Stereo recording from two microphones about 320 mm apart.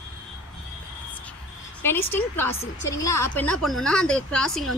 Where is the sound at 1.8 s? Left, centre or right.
Centre.